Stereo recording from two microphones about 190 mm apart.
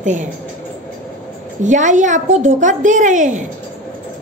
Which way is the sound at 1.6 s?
40° right (ahead or behind).